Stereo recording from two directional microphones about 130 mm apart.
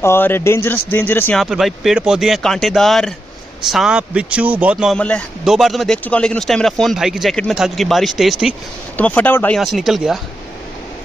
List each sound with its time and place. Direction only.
0.0 s speech: 20° left (ahead or behind)
1.4 s speech: centre (ahead or behind)
4.9 s speech: 10° left (ahead or behind)
5.4 s speech: centre (ahead or behind)
8.9 s speech: 15° left (ahead or behind)
9.6 s speech: centre (ahead or behind)